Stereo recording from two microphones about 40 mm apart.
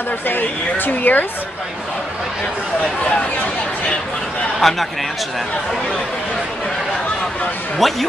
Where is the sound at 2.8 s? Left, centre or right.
Left.